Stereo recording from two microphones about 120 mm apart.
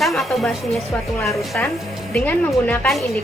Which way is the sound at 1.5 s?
10° left (ahead or behind).